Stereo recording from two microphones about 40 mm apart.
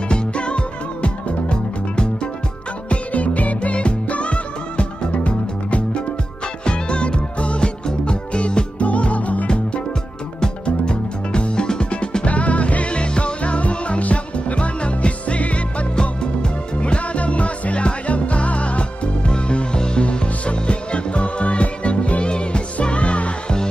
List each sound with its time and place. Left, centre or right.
0.1 s music: left
2.9 s music: left
10.4 s music: left
16.0 s music: left